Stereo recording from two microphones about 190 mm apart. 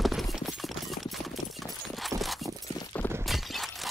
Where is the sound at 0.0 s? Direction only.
Centre (ahead or behind).